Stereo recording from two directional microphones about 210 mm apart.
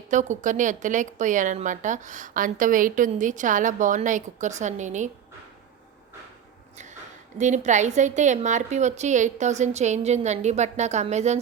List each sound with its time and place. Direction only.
0.1 s a woman's voice: 35° right (ahead or behind)
7.3 s a woman's voice: 35° right (ahead or behind)